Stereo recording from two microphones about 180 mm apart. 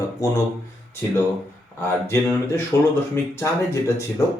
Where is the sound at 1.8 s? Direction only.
15° left (ahead or behind).